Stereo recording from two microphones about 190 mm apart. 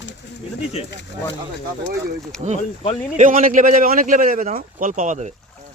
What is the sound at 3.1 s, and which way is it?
Speech, 45° right (ahead or behind).